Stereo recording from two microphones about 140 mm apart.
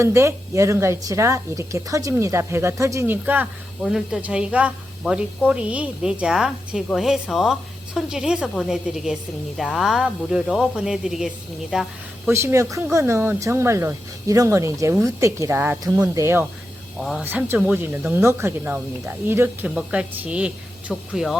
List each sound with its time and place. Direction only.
0.0 s a woman's voice: 20° right (ahead or behind)
3.8 s a woman's voice: 5° right (ahead or behind)
12.3 s a woman's voice: 20° right (ahead or behind)
17.0 s a woman's voice: centre (ahead or behind)
17.2 s speech: 15° right (ahead or behind)